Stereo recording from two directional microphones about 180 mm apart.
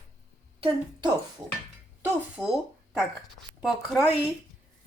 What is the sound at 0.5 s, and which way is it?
Speech, 30° right (ahead or behind).